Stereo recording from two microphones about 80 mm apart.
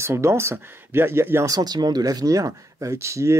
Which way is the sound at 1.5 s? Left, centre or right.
Right.